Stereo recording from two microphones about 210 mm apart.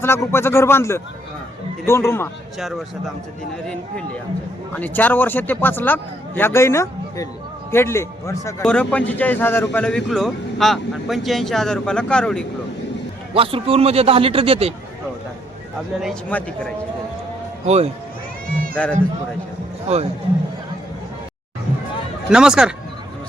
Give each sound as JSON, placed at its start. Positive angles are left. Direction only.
{"t": 0.0, "sound": "a man's voice", "side_deg": 10}
{"t": 2.6, "sound": "speech", "side_deg": 0}
{"t": 4.7, "sound": "a man's voice", "side_deg": 10}
{"t": 13.3, "sound": "a man's voice", "side_deg": -25}
{"t": 16.0, "sound": "speech", "side_deg": 0}
{"t": 17.7, "sound": "speech", "side_deg": -30}
{"t": 18.7, "sound": "a man's voice", "side_deg": 5}
{"t": 22.3, "sound": "speech", "side_deg": -5}